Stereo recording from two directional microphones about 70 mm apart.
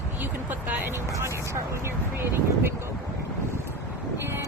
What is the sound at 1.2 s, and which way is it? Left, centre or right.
Speech, right.